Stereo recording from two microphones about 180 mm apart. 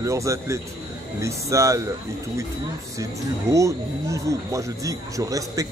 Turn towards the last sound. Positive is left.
turn(degrees=-20)  # may be behind; listen again after turning